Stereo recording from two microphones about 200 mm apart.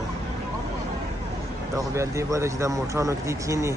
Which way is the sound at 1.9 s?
15° right (ahead or behind).